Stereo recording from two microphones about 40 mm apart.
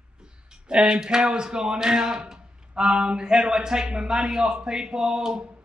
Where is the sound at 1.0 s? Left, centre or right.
Centre.